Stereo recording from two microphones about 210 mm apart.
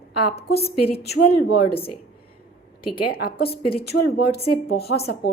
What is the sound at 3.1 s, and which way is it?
Speech, 45° left (ahead or behind).